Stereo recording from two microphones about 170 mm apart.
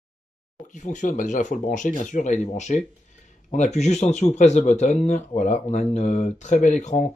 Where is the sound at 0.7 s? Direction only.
45° left (ahead or behind).